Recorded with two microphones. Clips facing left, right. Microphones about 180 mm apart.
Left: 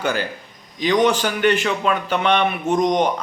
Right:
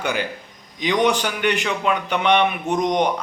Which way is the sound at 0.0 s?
15° right (ahead or behind).